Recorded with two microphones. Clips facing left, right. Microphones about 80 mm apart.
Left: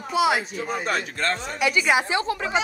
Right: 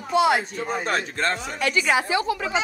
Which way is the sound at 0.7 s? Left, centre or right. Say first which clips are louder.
Right 1 dB; right.